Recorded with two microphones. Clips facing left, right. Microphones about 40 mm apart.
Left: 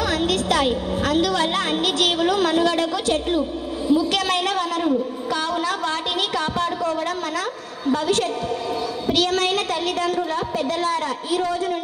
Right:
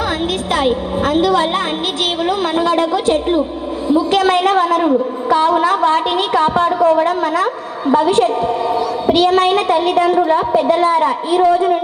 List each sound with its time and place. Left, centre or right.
0.5 s a woman's voice: right